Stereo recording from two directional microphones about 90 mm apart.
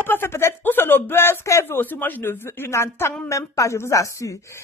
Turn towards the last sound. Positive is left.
turn(degrees=35)  # may be behind; listen again after turning